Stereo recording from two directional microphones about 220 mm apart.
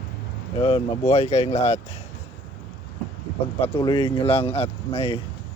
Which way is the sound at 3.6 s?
20° left (ahead or behind).